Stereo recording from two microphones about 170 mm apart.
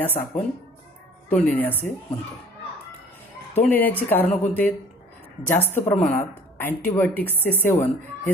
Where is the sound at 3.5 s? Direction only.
10° left (ahead or behind).